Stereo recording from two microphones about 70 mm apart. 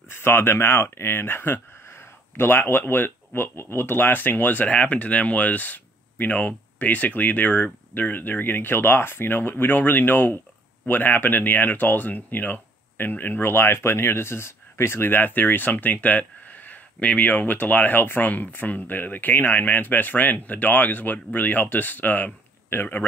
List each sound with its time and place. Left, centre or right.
0.1 s speech: left